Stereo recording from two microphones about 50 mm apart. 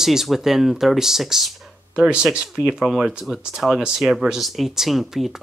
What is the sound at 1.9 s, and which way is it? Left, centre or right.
Speech, right.